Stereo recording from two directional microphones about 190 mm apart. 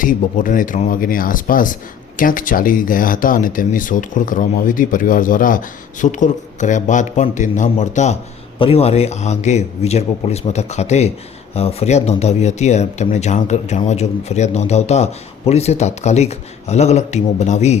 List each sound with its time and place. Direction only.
0.0 s speech: 45° left (ahead or behind)